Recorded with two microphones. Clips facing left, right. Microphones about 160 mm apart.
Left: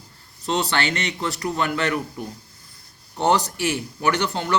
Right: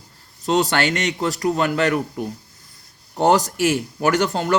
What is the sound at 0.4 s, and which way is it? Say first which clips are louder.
A man's voice: right 4 dB; 45° right (ahead or behind).